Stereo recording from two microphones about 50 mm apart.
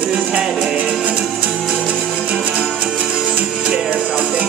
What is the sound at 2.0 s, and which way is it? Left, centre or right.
Music, centre.